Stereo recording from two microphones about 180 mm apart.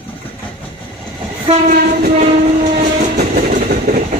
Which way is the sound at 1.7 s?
55° right (ahead or behind).